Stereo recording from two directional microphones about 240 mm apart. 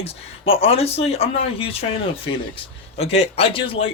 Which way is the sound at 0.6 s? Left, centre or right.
Left.